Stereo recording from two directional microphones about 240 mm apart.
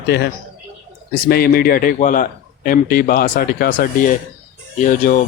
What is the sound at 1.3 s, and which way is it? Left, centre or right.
Speech, left.